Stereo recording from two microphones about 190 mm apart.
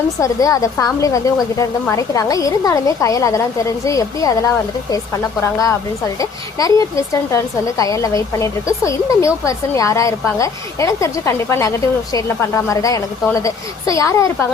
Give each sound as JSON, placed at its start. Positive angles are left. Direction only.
{"t": 0.2, "sound": "speech", "side_deg": 15}